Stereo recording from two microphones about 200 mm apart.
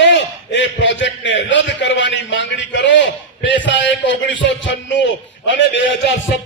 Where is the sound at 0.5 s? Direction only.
65° left (ahead or behind).